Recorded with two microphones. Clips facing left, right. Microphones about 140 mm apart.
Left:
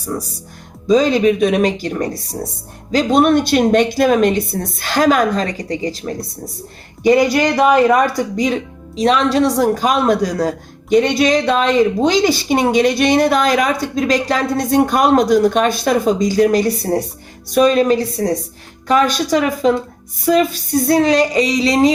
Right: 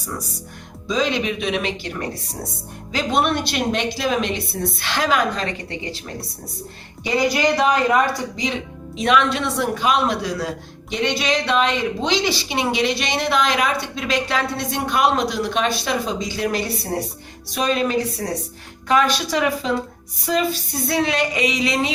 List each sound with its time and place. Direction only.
0.9 s a woman's voice: 40° left (ahead or behind)
7.3 s a man's voice: 55° left (ahead or behind)
9.0 s a woman's voice: 35° left (ahead or behind)